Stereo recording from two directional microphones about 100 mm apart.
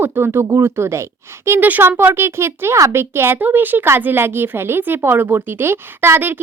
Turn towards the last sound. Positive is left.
turn(degrees=-20)  # may be behind; listen again after turning